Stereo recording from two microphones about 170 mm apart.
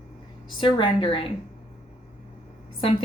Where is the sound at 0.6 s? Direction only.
30° left (ahead or behind).